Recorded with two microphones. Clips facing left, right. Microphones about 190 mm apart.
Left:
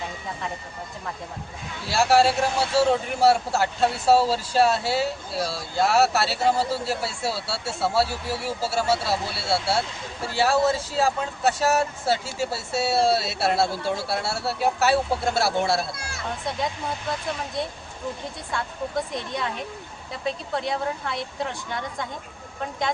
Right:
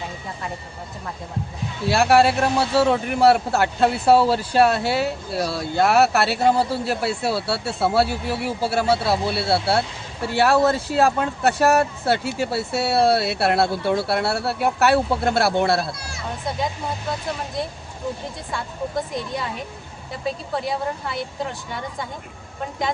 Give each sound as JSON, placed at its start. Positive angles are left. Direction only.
{"t": 1.9, "sound": "speech", "side_deg": -60}
{"t": 18.5, "sound": "speech", "side_deg": 0}